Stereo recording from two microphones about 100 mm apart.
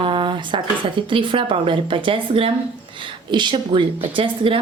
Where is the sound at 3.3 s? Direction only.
50° right (ahead or behind).